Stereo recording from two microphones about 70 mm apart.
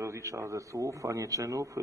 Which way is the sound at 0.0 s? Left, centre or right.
Right.